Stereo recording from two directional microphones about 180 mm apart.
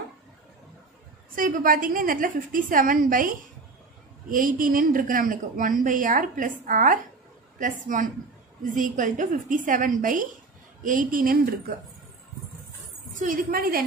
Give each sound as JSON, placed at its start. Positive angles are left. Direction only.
{"t": 1.3, "sound": "speech", "side_deg": -50}
{"t": 13.2, "sound": "speech", "side_deg": -50}